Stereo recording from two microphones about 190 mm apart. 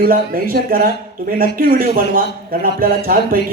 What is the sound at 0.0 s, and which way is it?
A man's voice, 50° right (ahead or behind).